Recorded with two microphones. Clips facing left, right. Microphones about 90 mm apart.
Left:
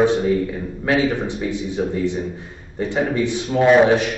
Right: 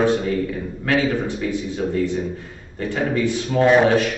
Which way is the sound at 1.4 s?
20° left (ahead or behind).